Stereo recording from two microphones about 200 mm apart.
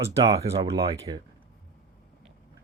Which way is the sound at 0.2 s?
15° right (ahead or behind).